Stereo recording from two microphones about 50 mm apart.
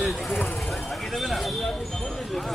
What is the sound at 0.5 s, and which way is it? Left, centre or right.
Speech, centre.